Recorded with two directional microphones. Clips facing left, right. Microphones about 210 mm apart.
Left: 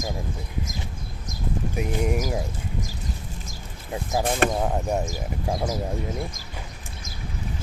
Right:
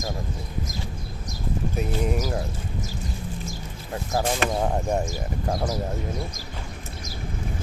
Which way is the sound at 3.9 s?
15° left (ahead or behind).